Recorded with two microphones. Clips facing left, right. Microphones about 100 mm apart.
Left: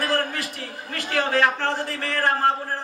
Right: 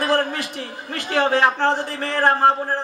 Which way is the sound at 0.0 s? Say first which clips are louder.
Right 4 dB; 25° right (ahead or behind).